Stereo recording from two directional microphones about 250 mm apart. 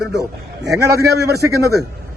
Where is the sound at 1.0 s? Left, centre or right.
Right.